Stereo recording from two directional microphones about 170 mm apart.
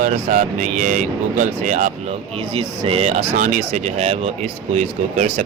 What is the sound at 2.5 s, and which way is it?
Speech, 30° right (ahead or behind).